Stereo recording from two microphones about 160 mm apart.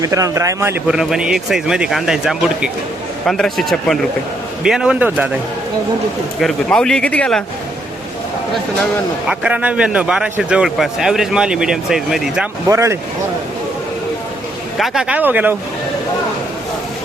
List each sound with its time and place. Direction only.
0.0 s a man's voice: 20° right (ahead or behind)
0.9 s a man's voice: 5° right (ahead or behind)
6.4 s a man's voice: 5° left (ahead or behind)
9.3 s a man's voice: 5° right (ahead or behind)
12.6 s a man's voice: 20° right (ahead or behind)
14.8 s speech: 5° right (ahead or behind)